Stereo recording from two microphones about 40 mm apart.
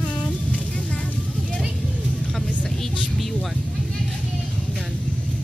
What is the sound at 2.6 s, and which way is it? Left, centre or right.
Music, centre.